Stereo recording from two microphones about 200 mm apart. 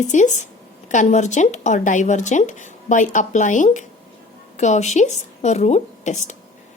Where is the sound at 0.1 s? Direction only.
35° left (ahead or behind).